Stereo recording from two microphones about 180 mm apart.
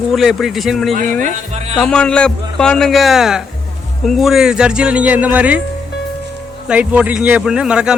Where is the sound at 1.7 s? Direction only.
5° left (ahead or behind).